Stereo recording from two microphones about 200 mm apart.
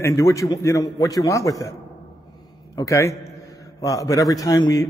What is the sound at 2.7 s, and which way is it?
A man's voice, 15° left (ahead or behind).